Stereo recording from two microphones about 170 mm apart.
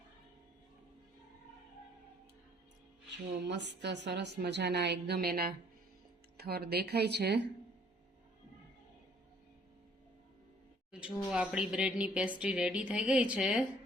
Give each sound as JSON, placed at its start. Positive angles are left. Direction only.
{"t": 3.4, "sound": "speech", "side_deg": -90}
{"t": 11.0, "sound": "speech", "side_deg": -5}